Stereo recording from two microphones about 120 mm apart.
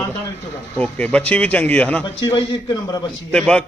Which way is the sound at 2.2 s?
35° left (ahead or behind).